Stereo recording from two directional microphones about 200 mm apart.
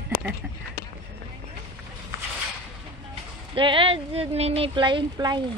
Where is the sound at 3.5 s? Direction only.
25° right (ahead or behind).